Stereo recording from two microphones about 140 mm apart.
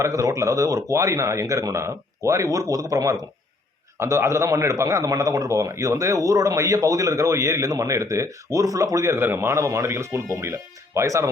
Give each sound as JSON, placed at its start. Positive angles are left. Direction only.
{"t": 0.0, "sound": "a man's voice", "side_deg": -25}